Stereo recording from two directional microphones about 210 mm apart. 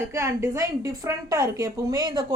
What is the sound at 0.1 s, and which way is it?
A woman's voice, 15° right (ahead or behind).